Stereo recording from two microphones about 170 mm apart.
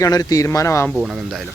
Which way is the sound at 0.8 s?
5° right (ahead or behind).